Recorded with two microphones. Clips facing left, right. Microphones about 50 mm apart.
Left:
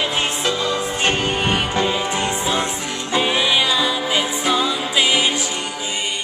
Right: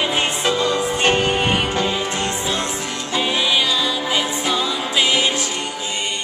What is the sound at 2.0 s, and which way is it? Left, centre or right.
Music, centre.